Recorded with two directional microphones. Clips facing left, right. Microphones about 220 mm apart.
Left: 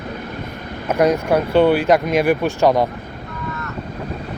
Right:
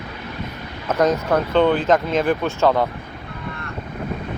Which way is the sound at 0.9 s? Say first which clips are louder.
Left 2 dB; 10° left (ahead or behind).